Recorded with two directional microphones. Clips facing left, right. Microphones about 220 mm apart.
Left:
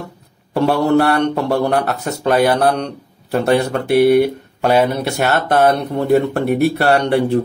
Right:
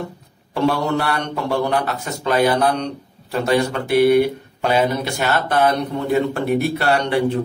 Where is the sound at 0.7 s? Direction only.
60° left (ahead or behind).